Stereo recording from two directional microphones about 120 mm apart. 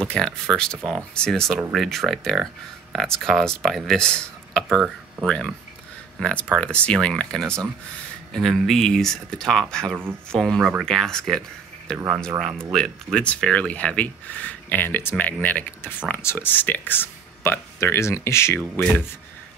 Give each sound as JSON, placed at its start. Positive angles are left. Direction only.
{"t": 0.1, "sound": "speech", "side_deg": 5}
{"t": 7.4, "sound": "speech", "side_deg": -20}
{"t": 8.3, "sound": "speech", "side_deg": 5}
{"t": 18.8, "sound": "speech", "side_deg": 5}